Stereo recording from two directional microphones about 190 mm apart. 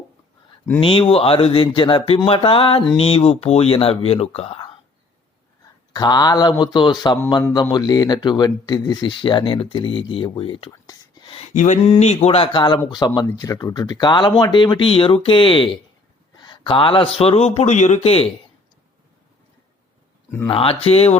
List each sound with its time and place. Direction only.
0.8 s a man's voice: 30° left (ahead or behind)
5.9 s speech: 20° left (ahead or behind)
11.3 s a man's voice: 40° left (ahead or behind)
20.5 s a man's voice: 30° left (ahead or behind)